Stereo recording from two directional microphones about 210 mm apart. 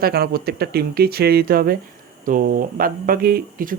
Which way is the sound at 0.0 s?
45° right (ahead or behind).